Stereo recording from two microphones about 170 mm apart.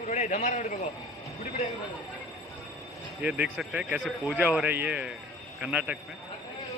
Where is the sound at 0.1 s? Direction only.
40° left (ahead or behind).